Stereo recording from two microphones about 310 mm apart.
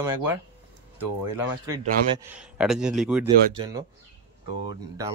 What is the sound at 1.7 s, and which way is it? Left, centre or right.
Speech, right.